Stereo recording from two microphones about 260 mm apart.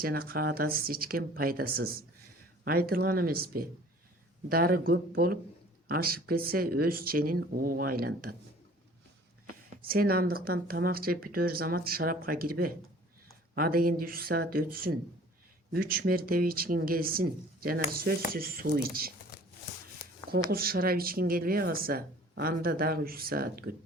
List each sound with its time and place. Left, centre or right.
0.0 s speech: right
9.6 s speech: right
20.5 s speech: right